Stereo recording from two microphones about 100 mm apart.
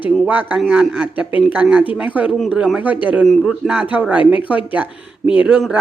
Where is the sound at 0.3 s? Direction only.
15° right (ahead or behind).